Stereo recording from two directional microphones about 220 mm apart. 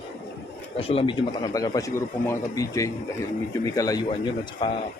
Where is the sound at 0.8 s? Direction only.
25° left (ahead or behind).